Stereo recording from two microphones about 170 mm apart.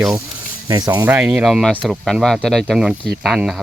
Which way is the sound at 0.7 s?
20° right (ahead or behind).